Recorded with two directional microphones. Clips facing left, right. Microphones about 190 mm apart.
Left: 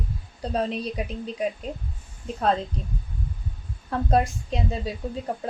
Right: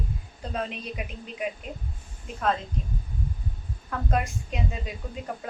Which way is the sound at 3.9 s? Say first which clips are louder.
Left 6 dB; 35° left (ahead or behind).